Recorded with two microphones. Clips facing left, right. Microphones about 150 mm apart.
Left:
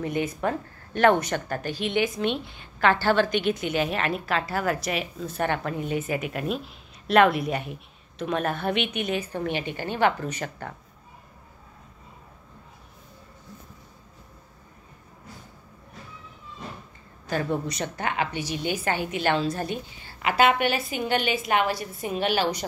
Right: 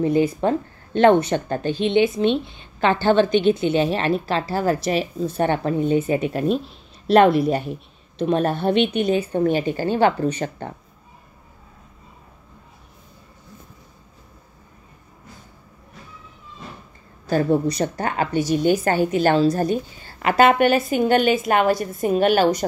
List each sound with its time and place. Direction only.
0.0 s a woman's voice: 30° right (ahead or behind)
17.3 s a woman's voice: 35° right (ahead or behind)